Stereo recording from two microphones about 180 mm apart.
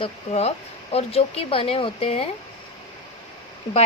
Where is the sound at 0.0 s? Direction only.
35° left (ahead or behind).